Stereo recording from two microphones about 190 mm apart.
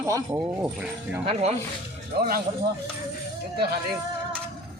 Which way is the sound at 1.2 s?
30° right (ahead or behind).